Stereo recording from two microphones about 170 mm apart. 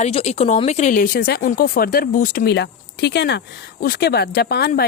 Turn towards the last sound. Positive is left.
turn(degrees=70)  # may be behind; listen again after turning